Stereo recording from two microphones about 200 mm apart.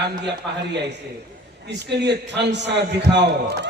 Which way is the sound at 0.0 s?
60° right (ahead or behind).